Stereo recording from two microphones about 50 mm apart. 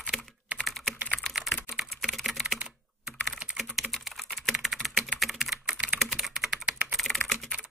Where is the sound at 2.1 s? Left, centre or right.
Centre.